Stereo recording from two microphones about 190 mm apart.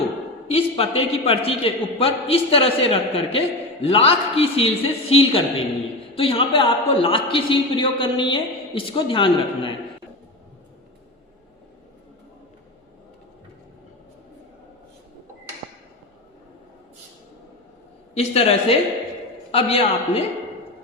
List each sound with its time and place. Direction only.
0.4 s a man's voice: 30° left (ahead or behind)
18.1 s a woman's voice: 30° left (ahead or behind)